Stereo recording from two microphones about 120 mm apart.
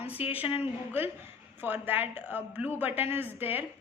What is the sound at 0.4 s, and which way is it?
Speech, 50° left (ahead or behind).